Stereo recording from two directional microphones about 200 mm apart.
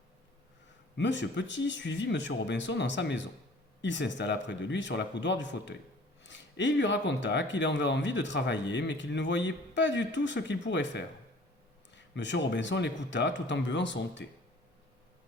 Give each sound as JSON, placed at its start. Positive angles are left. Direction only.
{"t": 0.9, "sound": "speech", "side_deg": 60}